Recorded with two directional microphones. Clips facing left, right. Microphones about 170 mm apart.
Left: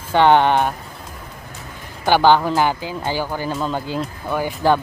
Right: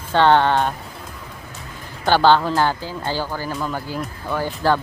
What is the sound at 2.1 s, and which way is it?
Speech, 15° left (ahead or behind).